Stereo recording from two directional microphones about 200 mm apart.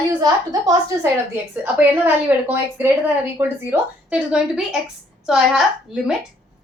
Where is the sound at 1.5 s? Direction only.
10° right (ahead or behind).